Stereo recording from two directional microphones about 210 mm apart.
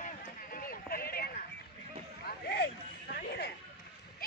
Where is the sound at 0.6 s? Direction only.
45° left (ahead or behind).